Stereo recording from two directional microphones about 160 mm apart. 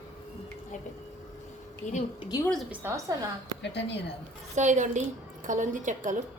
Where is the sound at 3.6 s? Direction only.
90° left.